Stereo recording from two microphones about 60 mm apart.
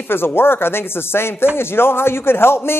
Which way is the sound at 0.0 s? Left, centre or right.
Left.